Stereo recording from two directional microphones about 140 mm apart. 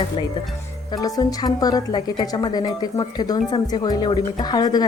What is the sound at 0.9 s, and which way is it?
A woman's voice, 25° left (ahead or behind).